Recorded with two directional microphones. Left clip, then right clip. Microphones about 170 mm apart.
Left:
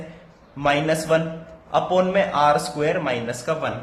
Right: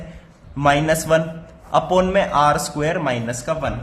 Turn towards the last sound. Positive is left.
turn(degrees=-25)  # may be behind; listen again after turning